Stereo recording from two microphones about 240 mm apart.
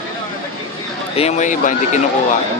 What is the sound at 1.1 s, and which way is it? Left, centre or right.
Speech, left.